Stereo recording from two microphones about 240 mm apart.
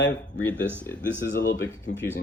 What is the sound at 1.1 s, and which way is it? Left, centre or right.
Speech, left.